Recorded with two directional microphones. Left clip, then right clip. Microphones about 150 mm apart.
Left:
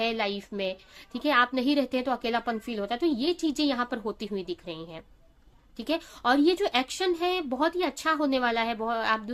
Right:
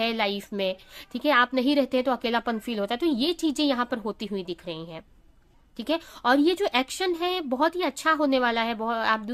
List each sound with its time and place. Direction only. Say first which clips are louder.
0.0 s a woman's voice: right 2 dB; 25° right (ahead or behind)